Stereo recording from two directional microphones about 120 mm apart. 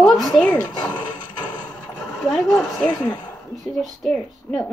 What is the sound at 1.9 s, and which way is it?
Speech, centre (ahead or behind).